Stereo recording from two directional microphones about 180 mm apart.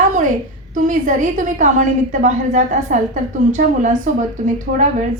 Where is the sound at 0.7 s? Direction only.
45° right (ahead or behind).